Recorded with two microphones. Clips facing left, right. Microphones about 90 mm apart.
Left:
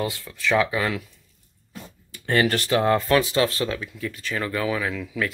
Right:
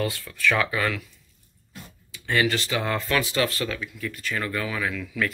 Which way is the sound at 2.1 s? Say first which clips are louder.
Left 2 dB; 45° left (ahead or behind).